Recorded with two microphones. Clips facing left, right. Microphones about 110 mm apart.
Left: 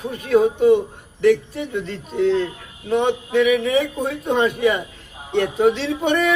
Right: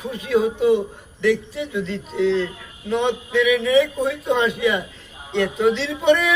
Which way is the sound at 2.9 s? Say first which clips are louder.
Left 2 dB; 45° left (ahead or behind).